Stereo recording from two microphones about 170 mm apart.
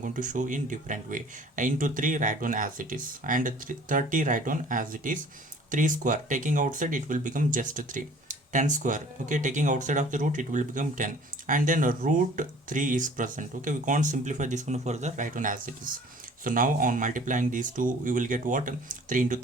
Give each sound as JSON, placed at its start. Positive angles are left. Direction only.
{"t": 0.0, "sound": "speech", "side_deg": -50}